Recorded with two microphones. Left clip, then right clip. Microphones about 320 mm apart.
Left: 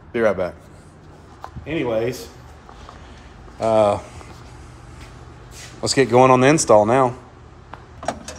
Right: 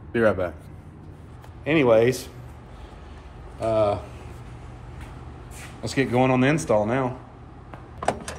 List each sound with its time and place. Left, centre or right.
0.1 s speech: left
1.6 s speech: centre
3.5 s speech: left
5.8 s speech: centre